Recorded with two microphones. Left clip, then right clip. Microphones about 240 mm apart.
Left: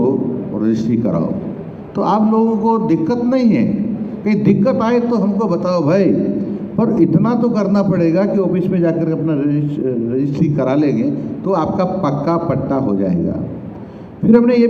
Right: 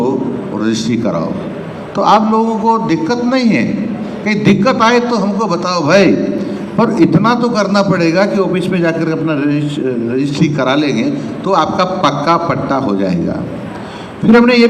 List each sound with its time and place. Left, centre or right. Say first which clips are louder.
0.6 s a man's voice: right 2 dB; right